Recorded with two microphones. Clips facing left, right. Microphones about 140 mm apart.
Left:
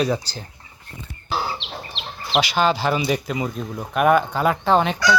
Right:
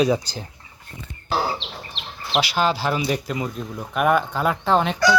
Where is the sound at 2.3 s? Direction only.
5° right (ahead or behind).